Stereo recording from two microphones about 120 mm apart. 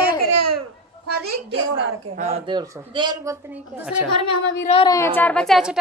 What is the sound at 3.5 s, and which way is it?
Speech, 15° right (ahead or behind).